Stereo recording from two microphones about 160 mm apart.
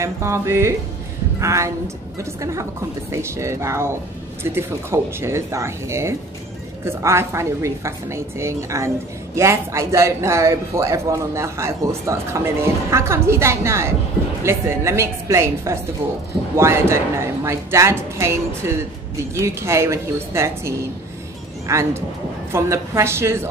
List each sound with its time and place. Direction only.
0.0 s a woman's voice: 15° right (ahead or behind)